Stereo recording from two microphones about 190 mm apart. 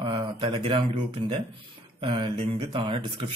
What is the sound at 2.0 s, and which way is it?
A man's voice, 30° right (ahead or behind).